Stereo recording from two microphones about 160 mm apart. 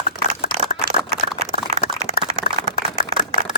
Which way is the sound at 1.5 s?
55° left (ahead or behind).